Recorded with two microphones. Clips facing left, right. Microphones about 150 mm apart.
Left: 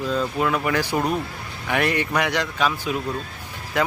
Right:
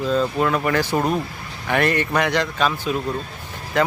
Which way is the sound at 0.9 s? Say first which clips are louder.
Right 2 dB; 10° right (ahead or behind).